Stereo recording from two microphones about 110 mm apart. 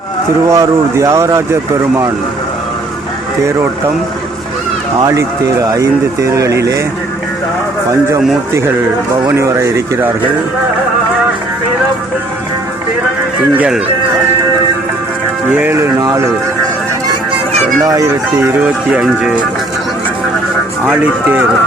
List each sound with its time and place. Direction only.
0.4 s speech: 30° right (ahead or behind)
5.7 s speech: 30° right (ahead or behind)
9.4 s speech: 25° right (ahead or behind)
13.6 s speech: 10° right (ahead or behind)
15.4 s speech: 15° right (ahead or behind)
17.8 s speech: 35° right (ahead or behind)
18.6 s speech: 10° right (ahead or behind)
20.8 s speech: 10° right (ahead or behind)